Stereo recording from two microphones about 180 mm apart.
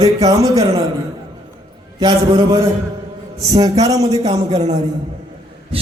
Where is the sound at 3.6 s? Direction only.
20° right (ahead or behind).